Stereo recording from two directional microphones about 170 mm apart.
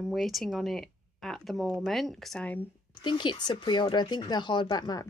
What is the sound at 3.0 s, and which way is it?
Speech, 25° left (ahead or behind).